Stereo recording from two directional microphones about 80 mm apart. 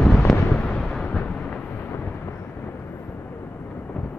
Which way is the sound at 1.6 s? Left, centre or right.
Left.